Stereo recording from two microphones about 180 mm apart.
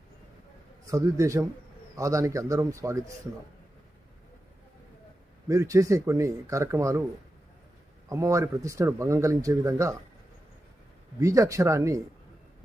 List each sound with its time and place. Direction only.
0.9 s speech: 20° right (ahead or behind)
5.5 s speech: 15° right (ahead or behind)
8.1 s speech: 15° right (ahead or behind)
11.2 s speech: 20° right (ahead or behind)